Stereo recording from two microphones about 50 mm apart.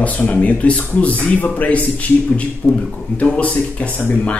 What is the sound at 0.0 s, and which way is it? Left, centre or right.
Speech, left.